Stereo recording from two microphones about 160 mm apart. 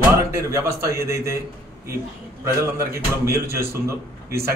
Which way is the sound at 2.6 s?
15° right (ahead or behind).